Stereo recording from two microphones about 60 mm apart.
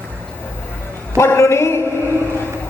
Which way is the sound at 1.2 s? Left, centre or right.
Left.